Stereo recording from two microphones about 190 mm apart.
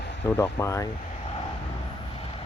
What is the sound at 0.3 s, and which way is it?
Speech, 15° left (ahead or behind).